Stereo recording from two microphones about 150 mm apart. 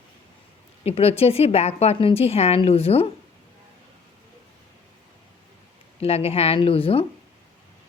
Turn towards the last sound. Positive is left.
turn(degrees=40)  # may be behind; listen again after turning